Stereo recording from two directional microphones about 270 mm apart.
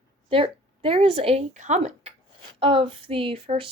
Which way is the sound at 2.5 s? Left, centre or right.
Centre.